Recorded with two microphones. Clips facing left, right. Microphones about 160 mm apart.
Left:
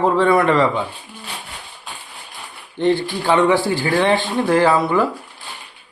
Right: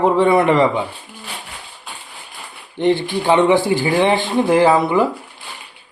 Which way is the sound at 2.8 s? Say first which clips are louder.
Right 1 dB; 20° right (ahead or behind).